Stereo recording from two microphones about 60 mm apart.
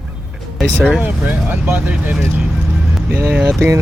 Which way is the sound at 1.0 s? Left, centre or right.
Right.